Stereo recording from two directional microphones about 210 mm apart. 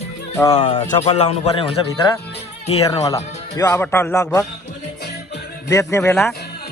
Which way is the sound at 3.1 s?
15° left (ahead or behind).